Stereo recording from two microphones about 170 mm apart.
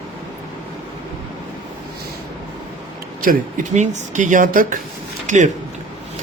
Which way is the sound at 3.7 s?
45° right (ahead or behind).